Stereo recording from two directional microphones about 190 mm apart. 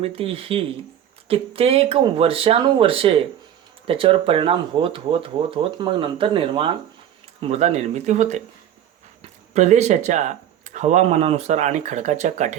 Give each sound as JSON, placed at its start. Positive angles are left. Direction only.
{"t": 0.0, "sound": "speech", "side_deg": -30}